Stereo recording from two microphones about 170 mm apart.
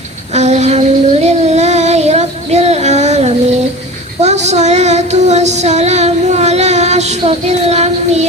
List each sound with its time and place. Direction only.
0.3 s child singing: 40° right (ahead or behind)